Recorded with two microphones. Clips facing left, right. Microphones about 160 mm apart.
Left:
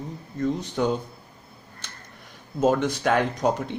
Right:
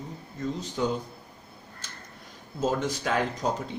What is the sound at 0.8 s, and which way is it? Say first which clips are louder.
Speech: left 4 dB; 60° left (ahead or behind).